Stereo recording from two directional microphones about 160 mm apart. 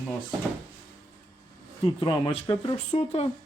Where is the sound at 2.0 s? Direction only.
30° left (ahead or behind).